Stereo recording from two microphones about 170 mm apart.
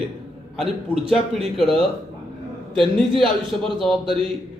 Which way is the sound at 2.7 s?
Centre (ahead or behind).